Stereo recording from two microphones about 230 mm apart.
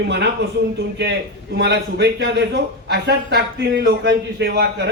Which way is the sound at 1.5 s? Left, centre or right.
Right.